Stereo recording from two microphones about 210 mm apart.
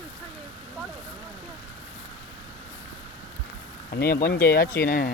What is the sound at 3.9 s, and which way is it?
Speech, 45° left (ahead or behind).